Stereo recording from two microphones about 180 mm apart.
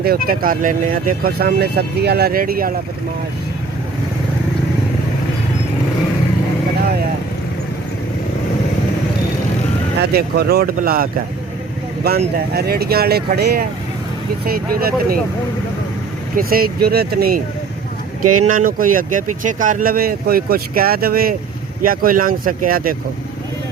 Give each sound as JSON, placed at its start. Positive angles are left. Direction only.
{"t": 0.0, "sound": "speech", "side_deg": -55}
{"t": 10.0, "sound": "speech", "side_deg": -60}
{"t": 16.3, "sound": "speech", "side_deg": -55}